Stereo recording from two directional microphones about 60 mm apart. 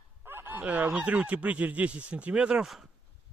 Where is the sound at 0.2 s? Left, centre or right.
Right.